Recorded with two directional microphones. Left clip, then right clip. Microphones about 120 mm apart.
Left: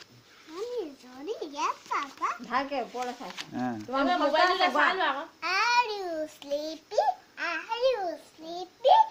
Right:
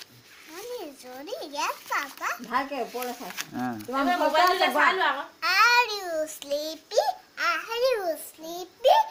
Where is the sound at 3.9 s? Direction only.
45° right (ahead or behind).